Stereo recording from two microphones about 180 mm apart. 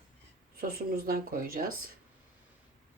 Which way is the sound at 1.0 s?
55° right (ahead or behind).